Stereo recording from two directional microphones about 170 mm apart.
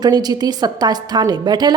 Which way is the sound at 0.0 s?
25° right (ahead or behind).